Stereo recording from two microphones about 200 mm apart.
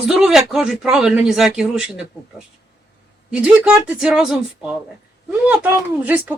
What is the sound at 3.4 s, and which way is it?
Speech, 5° right (ahead or behind).